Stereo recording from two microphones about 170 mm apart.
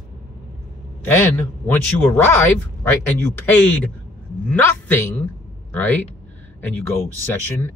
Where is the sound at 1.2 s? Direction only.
10° left (ahead or behind).